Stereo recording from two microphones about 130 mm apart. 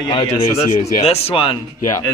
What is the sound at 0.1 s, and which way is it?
Speech, 40° left (ahead or behind).